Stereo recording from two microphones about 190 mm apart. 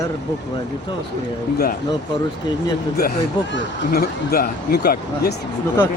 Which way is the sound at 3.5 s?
55° left (ahead or behind).